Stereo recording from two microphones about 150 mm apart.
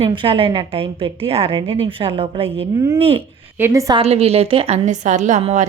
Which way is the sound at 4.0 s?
45° right (ahead or behind).